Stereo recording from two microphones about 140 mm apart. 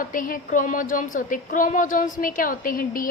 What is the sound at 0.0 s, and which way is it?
A woman's voice, 75° left (ahead or behind).